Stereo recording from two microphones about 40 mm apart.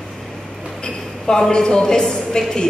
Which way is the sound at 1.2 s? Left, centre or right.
Centre.